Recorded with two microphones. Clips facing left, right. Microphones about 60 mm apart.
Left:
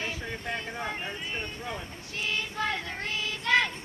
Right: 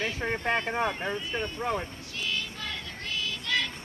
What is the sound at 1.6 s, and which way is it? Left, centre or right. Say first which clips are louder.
Speech: right 7 dB; right.